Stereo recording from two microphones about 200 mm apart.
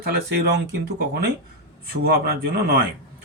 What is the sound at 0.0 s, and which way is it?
Speech, 55° right (ahead or behind).